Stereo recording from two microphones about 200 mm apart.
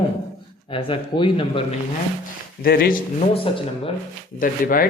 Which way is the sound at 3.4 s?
25° left (ahead or behind).